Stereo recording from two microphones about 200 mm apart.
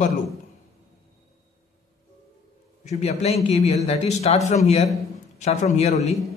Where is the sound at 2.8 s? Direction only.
35° left (ahead or behind).